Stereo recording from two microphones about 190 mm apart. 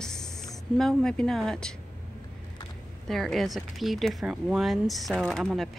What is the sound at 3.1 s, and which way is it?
Speech, centre (ahead or behind).